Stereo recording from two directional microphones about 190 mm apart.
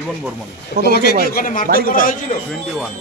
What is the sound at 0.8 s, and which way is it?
Speech, 60° left (ahead or behind).